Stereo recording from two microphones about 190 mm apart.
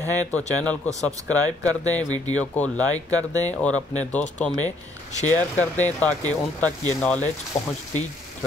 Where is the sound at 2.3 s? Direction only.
5° left (ahead or behind).